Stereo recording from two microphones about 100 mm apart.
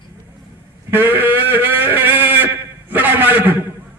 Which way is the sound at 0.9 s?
25° right (ahead or behind).